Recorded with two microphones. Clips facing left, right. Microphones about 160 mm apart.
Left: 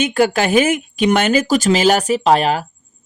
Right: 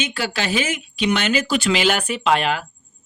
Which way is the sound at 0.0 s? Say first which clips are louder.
Left 9 dB; 50° left (ahead or behind).